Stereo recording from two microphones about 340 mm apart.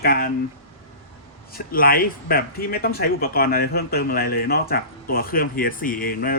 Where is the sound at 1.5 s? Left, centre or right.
Left.